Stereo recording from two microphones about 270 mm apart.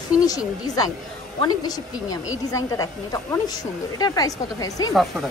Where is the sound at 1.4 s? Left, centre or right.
Centre.